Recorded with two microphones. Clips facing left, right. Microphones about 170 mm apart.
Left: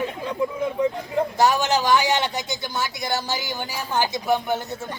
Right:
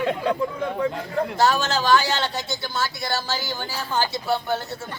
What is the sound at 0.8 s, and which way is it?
Speech, 15° left (ahead or behind).